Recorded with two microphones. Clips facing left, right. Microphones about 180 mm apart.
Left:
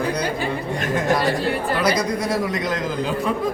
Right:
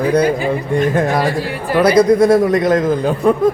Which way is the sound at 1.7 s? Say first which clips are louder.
Right 15 dB; 55° right (ahead or behind).